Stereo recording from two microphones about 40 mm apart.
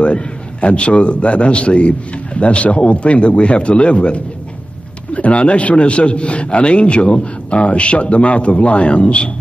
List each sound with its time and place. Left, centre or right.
0.0 s a man's voice: left